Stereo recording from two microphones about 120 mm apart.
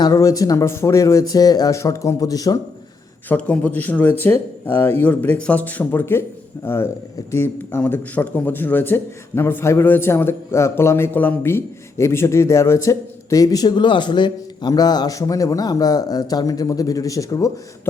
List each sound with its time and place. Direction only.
0.0 s speech: 30° left (ahead or behind)
3.2 s speech: 10° left (ahead or behind); by 17.5 s 30° left (ahead or behind)